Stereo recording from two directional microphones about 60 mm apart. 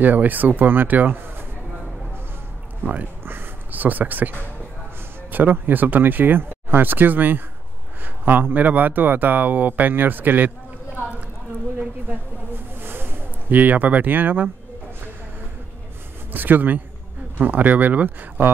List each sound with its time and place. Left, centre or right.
0.0 s speech: right
2.8 s speech: right
3.3 s a sound: right
5.3 s speech: right
12.8 s a sound: right
16.3 s a man's voice: right